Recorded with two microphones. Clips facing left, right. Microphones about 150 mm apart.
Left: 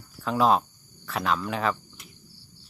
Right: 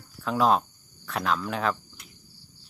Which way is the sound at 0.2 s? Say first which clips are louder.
Left 1 dB; centre (ahead or behind).